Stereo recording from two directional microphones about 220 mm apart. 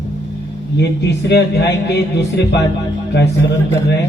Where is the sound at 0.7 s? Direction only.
50° left (ahead or behind).